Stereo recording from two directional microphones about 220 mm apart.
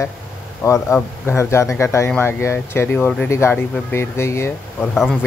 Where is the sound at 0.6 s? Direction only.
15° left (ahead or behind).